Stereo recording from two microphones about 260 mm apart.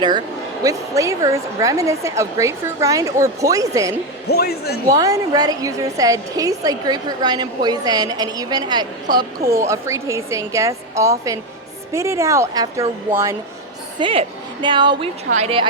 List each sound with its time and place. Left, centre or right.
0.6 s a woman's voice: centre
4.3 s speech: left
4.9 s a woman's voice: centre
14.0 s a woman's voice: centre